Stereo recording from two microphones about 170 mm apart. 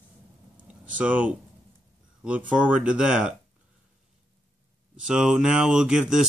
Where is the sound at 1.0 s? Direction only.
10° right (ahead or behind).